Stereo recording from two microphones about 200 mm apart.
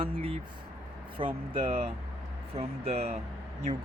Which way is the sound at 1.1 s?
30° right (ahead or behind).